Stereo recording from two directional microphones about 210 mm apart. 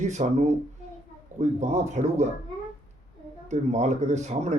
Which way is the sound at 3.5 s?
35° right (ahead or behind).